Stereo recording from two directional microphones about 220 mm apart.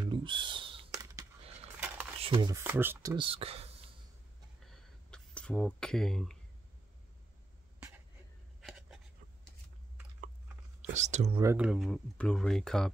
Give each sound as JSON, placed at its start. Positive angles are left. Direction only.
{"t": 0.0, "sound": "a sound", "side_deg": -20}
{"t": 2.1, "sound": "speech", "side_deg": -25}
{"t": 4.6, "sound": "a sound", "side_deg": 5}
{"t": 8.5, "sound": "writing", "side_deg": 0}
{"t": 10.9, "sound": "speech", "side_deg": -30}
{"t": 11.4, "sound": "speech", "side_deg": -5}